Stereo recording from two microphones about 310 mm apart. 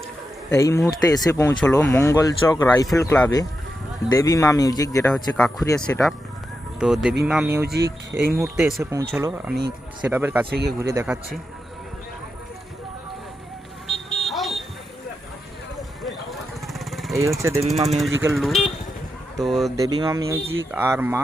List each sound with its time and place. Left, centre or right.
0.5 s speech: centre
13.8 s vehicle: centre
16.0 s jackhammer: centre
17.7 s speech: centre
18.2 s speech: centre
19.7 s speech: centre